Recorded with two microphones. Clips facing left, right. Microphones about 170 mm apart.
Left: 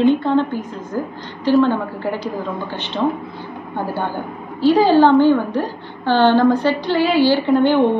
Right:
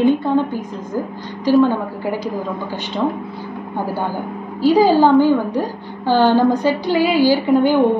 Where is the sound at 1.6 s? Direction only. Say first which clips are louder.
Right 1 dB; 10° right (ahead or behind).